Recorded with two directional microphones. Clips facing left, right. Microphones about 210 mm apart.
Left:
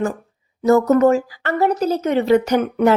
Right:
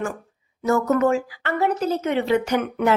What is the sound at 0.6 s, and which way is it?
A woman's voice, 35° left (ahead or behind).